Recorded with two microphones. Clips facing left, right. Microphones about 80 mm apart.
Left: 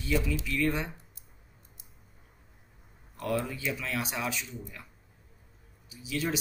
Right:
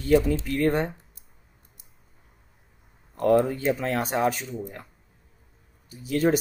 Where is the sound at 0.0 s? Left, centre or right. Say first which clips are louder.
Right 10 dB; right.